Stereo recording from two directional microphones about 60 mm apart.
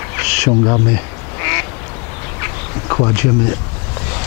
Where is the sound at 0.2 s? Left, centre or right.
Centre.